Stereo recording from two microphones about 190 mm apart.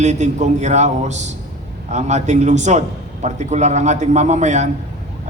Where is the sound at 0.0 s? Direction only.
40° right (ahead or behind).